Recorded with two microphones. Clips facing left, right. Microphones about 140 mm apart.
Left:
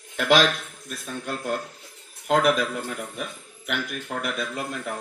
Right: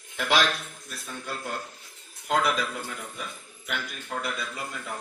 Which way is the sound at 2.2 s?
50° left (ahead or behind).